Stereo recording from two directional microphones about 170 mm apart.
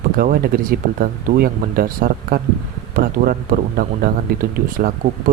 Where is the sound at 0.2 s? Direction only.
60° right (ahead or behind).